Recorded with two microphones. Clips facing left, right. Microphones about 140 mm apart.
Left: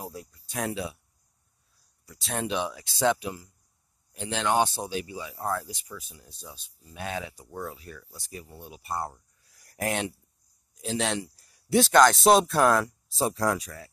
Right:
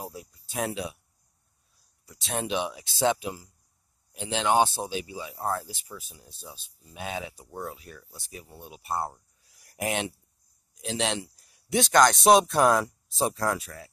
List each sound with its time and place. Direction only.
0.6 s speech: 15° right (ahead or behind)
2.1 s speech: centre (ahead or behind)
2.4 s speech: 15° right (ahead or behind)
7.3 s speech: centre (ahead or behind)
8.5 s speech: 25° right (ahead or behind)
9.7 s speech: centre (ahead or behind)